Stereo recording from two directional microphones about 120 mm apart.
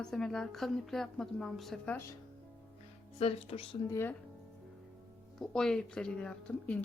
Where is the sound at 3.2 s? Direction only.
55° left (ahead or behind).